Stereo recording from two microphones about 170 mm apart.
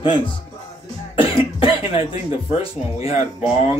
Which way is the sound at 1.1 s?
30° left (ahead or behind).